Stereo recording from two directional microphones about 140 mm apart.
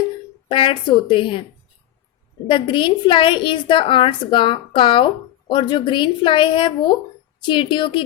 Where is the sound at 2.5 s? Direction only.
35° left (ahead or behind).